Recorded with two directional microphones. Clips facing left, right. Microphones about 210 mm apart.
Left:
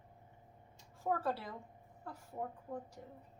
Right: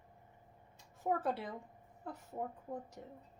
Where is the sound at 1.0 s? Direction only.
20° right (ahead or behind).